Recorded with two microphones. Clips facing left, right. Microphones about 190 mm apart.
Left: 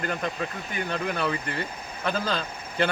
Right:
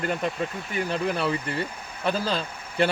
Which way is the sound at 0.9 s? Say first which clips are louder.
Right 2 dB; 35° right (ahead or behind).